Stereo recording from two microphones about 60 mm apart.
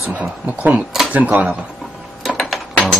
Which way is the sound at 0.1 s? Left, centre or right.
Right.